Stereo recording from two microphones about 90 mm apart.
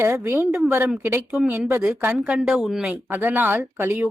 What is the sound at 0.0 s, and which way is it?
Speech, 25° right (ahead or behind).